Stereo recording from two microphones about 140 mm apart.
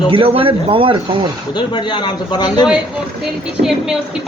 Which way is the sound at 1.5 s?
35° left (ahead or behind).